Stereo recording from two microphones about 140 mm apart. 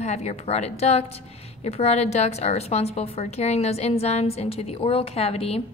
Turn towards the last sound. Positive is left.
turn(degrees=45)  # may be behind; listen again after turning